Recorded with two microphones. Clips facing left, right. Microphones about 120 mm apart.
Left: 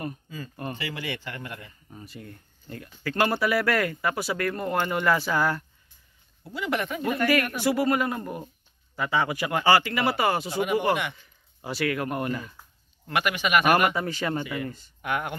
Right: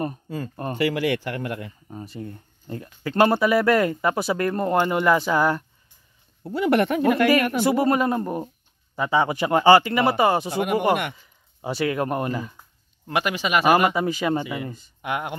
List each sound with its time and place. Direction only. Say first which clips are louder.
0.7 s speech: right 11 dB; 80° right; by 1.7 s 60° right (ahead or behind)
1.9 s speech: right 6 dB; 30° right (ahead or behind)
6.4 s speech: right 9 dB; 55° right (ahead or behind)
7.6 s a man's voice: right 4 dB; 30° right (ahead or behind)
10.5 s speech: right 2 dB; 55° right (ahead or behind)
11.6 s speech: right 4 dB; 25° right (ahead or behind)